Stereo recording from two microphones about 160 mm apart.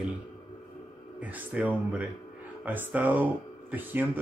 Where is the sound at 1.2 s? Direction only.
10° right (ahead or behind).